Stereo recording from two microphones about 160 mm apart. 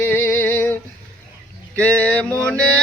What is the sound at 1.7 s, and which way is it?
Music, 10° left (ahead or behind).